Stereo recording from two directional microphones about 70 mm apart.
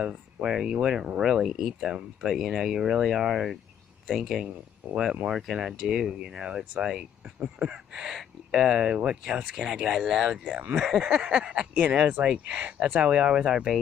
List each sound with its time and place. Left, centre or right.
0.0 s speech: centre
8.1 s speech: centre